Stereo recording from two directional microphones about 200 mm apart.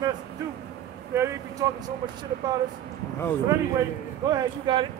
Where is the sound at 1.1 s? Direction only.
15° right (ahead or behind).